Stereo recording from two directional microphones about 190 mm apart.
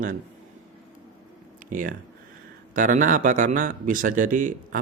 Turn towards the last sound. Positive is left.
turn(degrees=-45)  # may be behind; listen again after turning